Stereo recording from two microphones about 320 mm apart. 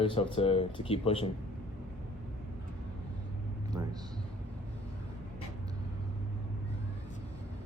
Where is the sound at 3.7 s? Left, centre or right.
Centre.